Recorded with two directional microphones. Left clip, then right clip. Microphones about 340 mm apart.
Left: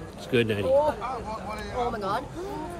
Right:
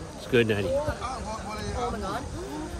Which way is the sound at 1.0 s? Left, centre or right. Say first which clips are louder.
Left 1 dB; left.